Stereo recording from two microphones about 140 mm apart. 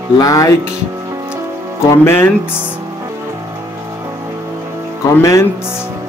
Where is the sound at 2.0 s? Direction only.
15° left (ahead or behind).